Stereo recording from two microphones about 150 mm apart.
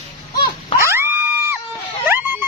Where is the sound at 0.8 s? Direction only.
15° right (ahead or behind).